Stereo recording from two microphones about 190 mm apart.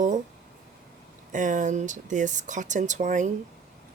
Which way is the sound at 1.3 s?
40° right (ahead or behind).